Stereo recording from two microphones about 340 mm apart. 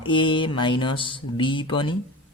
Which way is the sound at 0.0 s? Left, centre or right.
Centre.